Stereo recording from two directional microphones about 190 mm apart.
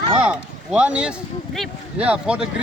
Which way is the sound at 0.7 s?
5° right (ahead or behind).